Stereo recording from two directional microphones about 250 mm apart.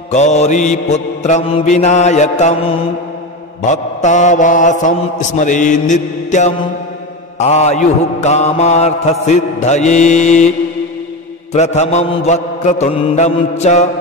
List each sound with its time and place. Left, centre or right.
0.1 s mantra: left
3.6 s mantra: left
11.5 s mantra: left